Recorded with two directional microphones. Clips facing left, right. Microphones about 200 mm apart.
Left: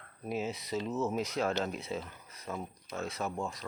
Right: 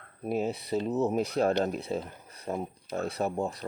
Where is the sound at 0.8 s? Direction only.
35° right (ahead or behind).